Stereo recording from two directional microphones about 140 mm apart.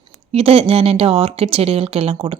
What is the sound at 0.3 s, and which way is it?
Speech, 45° right (ahead or behind).